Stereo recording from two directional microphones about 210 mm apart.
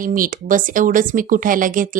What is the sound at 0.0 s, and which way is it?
Speech, 40° right (ahead or behind).